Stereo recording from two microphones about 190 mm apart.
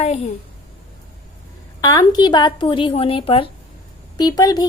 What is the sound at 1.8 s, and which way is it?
A woman's voice, 20° left (ahead or behind).